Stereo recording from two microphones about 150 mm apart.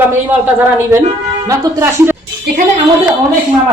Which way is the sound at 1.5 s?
20° right (ahead or behind).